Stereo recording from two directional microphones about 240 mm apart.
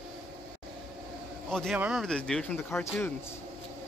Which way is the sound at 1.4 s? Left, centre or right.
Centre.